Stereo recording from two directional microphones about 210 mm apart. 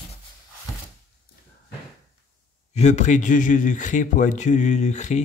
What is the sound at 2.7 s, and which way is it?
Speech, 35° left (ahead or behind).